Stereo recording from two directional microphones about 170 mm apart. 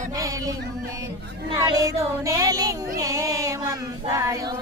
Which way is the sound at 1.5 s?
20° right (ahead or behind).